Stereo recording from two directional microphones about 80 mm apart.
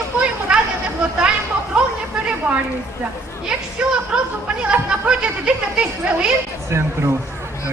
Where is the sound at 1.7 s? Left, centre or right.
Centre.